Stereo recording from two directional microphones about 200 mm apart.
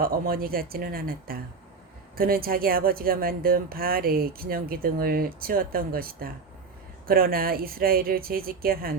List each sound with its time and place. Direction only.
0.0 s speech: 45° right (ahead or behind)